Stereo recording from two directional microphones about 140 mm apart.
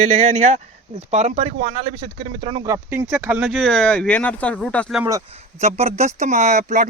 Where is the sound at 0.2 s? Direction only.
55° right (ahead or behind).